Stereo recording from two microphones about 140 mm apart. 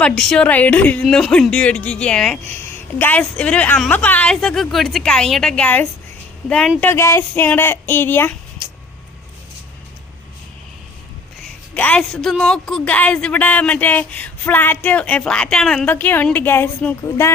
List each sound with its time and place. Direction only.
0.0 s speech: 5° left (ahead or behind)
11.7 s speech: 10° left (ahead or behind)